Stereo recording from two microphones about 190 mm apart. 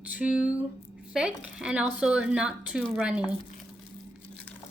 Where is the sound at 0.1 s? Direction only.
5° right (ahead or behind).